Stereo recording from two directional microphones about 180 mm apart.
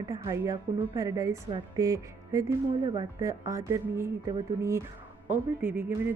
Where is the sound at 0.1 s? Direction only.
20° right (ahead or behind).